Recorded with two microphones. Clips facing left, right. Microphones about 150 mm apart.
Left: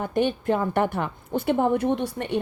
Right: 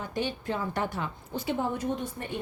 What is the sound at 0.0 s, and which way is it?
A woman's voice, 55° left (ahead or behind).